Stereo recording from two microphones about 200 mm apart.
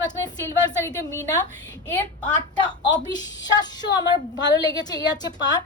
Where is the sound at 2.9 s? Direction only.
20° left (ahead or behind).